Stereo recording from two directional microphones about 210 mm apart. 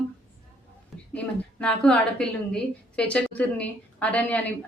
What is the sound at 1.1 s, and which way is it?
A woman's voice, 5° left (ahead or behind).